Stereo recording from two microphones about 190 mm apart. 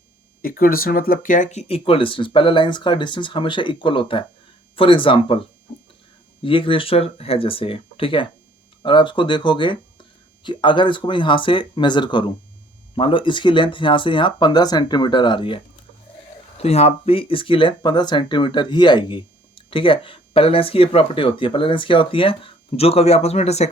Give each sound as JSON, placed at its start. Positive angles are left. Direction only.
{"t": 0.4, "sound": "speech", "side_deg": 50}
{"t": 6.4, "sound": "speech", "side_deg": 25}